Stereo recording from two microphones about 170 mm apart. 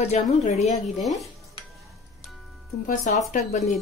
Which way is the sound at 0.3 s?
40° left (ahead or behind).